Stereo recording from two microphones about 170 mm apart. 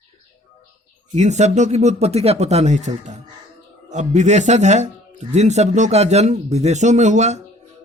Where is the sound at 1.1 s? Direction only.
45° right (ahead or behind).